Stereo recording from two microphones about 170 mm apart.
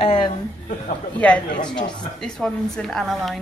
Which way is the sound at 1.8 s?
25° left (ahead or behind).